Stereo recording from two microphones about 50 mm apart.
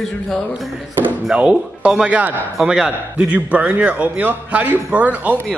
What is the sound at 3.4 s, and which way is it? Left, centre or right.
Speech, right.